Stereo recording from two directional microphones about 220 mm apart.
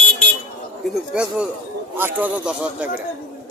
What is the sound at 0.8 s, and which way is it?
Speech, 5° right (ahead or behind).